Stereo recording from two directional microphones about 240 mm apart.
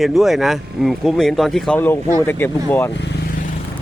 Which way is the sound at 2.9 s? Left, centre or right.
Left.